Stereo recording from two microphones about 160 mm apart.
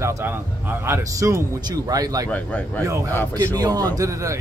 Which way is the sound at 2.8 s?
20° right (ahead or behind).